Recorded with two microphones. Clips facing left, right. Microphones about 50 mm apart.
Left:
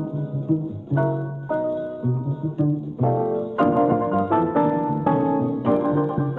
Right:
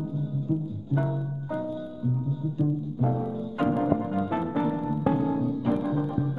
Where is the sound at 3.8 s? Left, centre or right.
Left.